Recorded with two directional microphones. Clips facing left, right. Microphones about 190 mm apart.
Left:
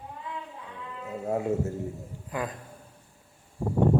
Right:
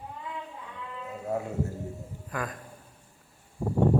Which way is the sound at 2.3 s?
20° left (ahead or behind).